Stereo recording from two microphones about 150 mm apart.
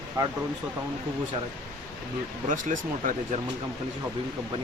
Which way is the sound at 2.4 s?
60° right (ahead or behind).